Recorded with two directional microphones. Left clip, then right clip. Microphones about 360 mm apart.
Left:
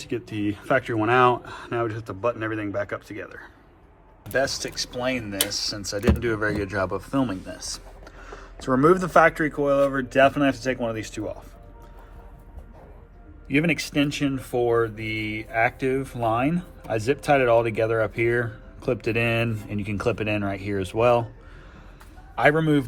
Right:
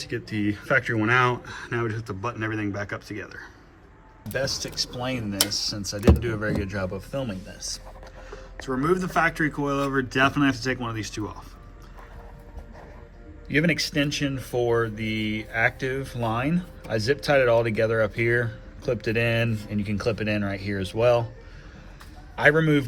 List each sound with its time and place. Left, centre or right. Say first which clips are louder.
0.0 s speech: even; centre
6.9 s speech: left 5 dB; left
7.5 s speech: even; centre
13.5 s a man's voice: even; left
13.7 s speech: even; centre
22.5 s a man's voice: even; left